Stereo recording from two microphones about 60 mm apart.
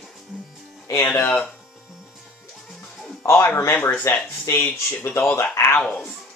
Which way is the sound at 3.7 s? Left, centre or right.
Left.